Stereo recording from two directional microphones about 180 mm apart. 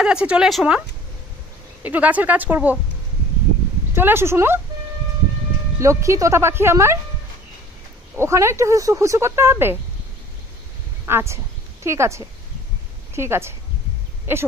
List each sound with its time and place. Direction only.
0.0 s speech: 5° right (ahead or behind)
3.9 s speech: 15° right (ahead or behind)
5.8 s speech: 15° right (ahead or behind)
8.2 s speech: 15° right (ahead or behind)
11.1 s speech: 15° right (ahead or behind)